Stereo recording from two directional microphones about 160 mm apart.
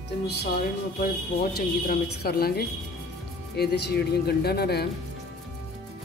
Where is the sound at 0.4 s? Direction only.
70° left (ahead or behind).